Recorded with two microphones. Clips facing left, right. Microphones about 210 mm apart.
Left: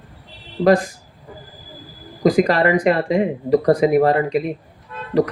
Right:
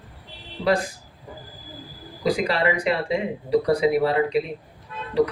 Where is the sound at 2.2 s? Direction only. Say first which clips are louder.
Left 7 dB; 50° left (ahead or behind).